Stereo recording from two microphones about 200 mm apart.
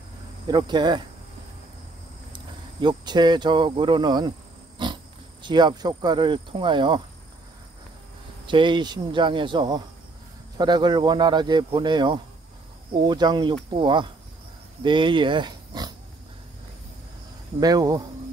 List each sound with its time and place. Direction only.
0.5 s speech: 20° right (ahead or behind)
2.3 s speech: 20° right (ahead or behind)
4.8 s pig: 20° right (ahead or behind)
5.4 s speech: 20° right (ahead or behind)
8.5 s speech: 25° right (ahead or behind)
17.6 s speech: 20° right (ahead or behind)